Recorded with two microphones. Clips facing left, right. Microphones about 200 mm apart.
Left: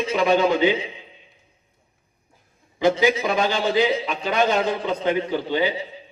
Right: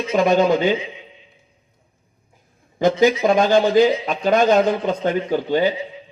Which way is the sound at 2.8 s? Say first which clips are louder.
Right 3 dB; 45° right (ahead or behind).